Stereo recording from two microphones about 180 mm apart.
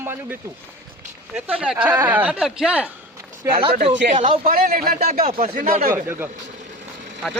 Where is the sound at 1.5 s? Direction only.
5° right (ahead or behind).